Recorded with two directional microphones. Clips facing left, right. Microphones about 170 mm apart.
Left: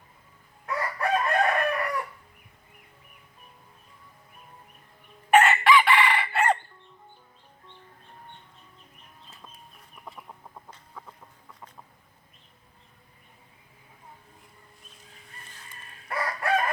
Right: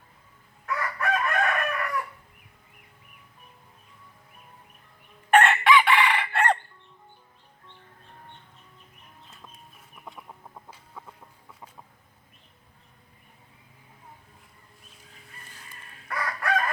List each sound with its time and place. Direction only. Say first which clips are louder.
0.6 s chicken: left 1 dB; 30° left (ahead or behind)
5.3 s chicken: even; 5° left (ahead or behind)
10.1 s chicken: even; centre (ahead or behind)
16.0 s chicken: left 1 dB; 25° left (ahead or behind)